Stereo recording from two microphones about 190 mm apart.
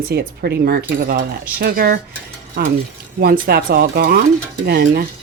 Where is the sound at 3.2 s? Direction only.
55° right (ahead or behind).